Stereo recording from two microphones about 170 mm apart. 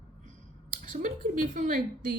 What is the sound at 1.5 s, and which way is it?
Speech, 55° right (ahead or behind).